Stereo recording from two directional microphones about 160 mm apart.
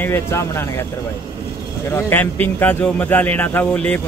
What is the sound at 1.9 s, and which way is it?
A man's voice, 15° left (ahead or behind).